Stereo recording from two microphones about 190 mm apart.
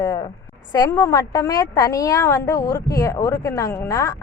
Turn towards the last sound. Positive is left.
turn(degrees=15)  # may be behind; listen again after turning